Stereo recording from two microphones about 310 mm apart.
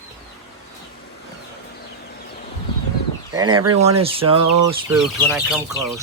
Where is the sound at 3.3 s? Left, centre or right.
Centre.